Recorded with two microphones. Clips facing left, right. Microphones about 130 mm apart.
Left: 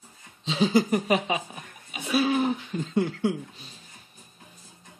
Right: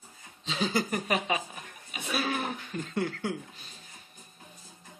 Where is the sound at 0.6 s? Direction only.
25° left (ahead or behind).